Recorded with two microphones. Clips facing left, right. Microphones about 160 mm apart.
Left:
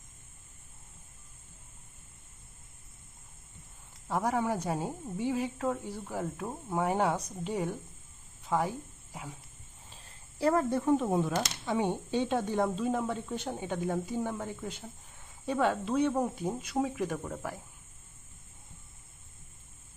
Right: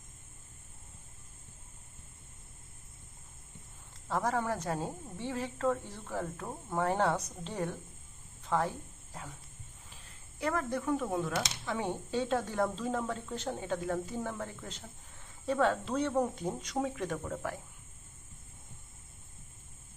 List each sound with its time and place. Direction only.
4.1 s a woman's voice: 10° left (ahead or behind)
9.9 s a woman's voice: 30° left (ahead or behind); by 17.5 s 5° left (ahead or behind)